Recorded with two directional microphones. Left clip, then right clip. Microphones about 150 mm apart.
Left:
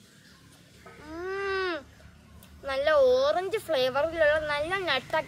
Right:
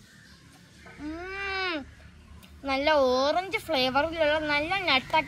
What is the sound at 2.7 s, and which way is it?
A woman's voice, 30° left (ahead or behind).